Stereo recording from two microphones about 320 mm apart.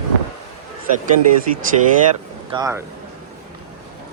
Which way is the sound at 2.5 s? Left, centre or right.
Centre.